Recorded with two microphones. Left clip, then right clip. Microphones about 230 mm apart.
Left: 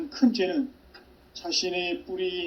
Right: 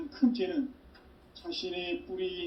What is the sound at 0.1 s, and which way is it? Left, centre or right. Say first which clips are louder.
A man's voice: left 5 dB; left.